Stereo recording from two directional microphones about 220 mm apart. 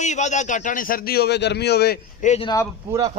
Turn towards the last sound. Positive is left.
turn(degrees=-15)  # may be behind; listen again after turning